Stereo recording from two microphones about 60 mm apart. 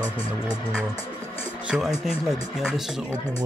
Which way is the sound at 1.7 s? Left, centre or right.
Centre.